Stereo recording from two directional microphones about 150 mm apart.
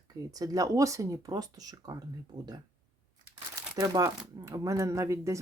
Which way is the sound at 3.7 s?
25° right (ahead or behind).